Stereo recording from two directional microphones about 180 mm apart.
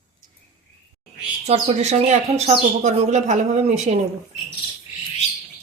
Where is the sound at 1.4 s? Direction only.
35° right (ahead or behind).